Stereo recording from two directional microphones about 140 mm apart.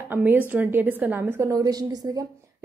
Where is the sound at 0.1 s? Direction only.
15° right (ahead or behind).